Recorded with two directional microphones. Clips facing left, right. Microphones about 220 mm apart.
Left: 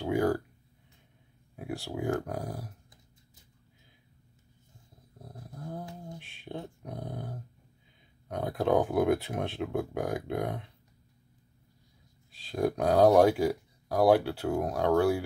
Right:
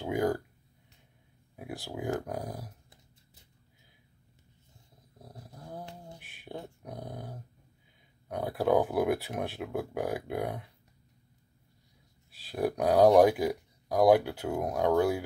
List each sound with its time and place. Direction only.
0.0 s a sound: 20° right (ahead or behind)
1.6 s speech: 15° right (ahead or behind)
5.2 s dog: 10° right (ahead or behind)
6.9 s speech: 10° right (ahead or behind)
12.4 s speech: 15° right (ahead or behind)